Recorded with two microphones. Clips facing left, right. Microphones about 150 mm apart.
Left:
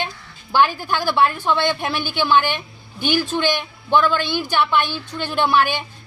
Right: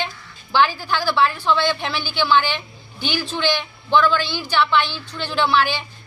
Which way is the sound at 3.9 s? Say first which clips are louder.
Even; 15° left (ahead or behind).